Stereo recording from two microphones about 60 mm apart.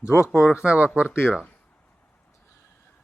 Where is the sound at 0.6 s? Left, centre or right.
Right.